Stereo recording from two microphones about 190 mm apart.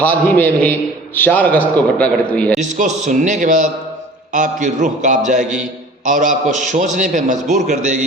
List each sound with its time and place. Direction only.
0.0 s a man's voice: 10° left (ahead or behind)
2.6 s a man's voice: 40° right (ahead or behind)